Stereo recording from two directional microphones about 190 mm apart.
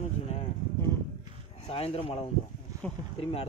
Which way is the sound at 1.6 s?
30° left (ahead or behind).